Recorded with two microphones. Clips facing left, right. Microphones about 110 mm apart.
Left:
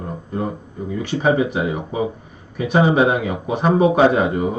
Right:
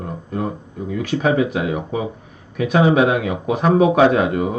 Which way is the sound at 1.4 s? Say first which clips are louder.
Right 1 dB; 65° right (ahead or behind).